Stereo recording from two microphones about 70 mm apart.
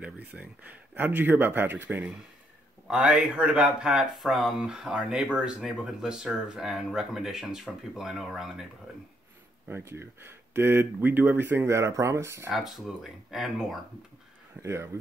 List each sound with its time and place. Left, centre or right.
0.0 s speech: right
2.9 s speech: centre
9.7 s speech: right
12.4 s speech: centre
14.6 s speech: right